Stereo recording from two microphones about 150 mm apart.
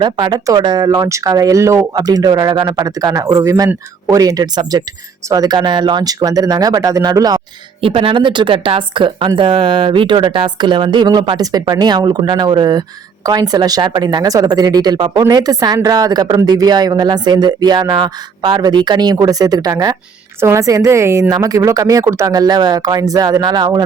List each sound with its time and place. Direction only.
0.0 s a woman's voice: 30° right (ahead or behind)
7.8 s a woman's voice: 40° right (ahead or behind)